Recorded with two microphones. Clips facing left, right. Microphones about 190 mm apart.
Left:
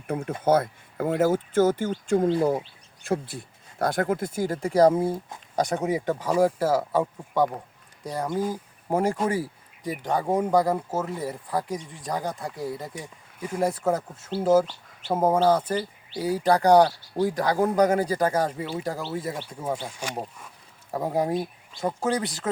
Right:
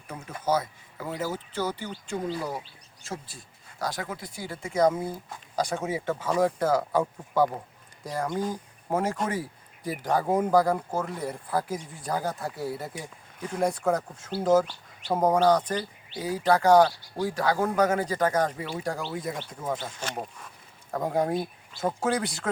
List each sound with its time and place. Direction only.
0.1 s speech: 55° left (ahead or behind); by 7.6 s centre (ahead or behind)
8.1 s speech: 20° left (ahead or behind)
8.4 s speech: 5° left (ahead or behind)
13.4 s speech: 5° left (ahead or behind)
14.3 s speech: 10° right (ahead or behind)
15.1 s speech: 5° left (ahead or behind)